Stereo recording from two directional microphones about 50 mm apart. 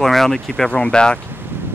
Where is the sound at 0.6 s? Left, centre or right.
Left.